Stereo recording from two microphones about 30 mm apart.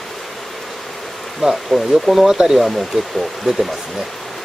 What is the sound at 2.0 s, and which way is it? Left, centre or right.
Speech, centre.